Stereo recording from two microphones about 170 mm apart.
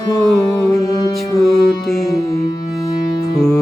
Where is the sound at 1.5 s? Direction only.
Centre (ahead or behind).